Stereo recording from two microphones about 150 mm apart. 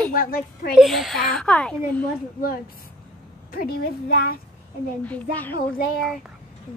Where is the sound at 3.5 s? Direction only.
85° left.